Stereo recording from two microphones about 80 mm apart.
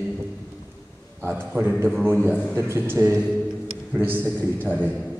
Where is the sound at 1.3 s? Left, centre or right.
Right.